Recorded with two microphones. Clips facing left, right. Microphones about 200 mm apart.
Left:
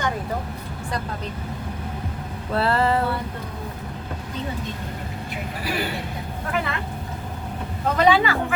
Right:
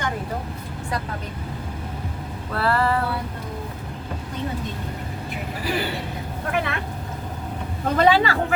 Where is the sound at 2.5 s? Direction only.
25° left (ahead or behind).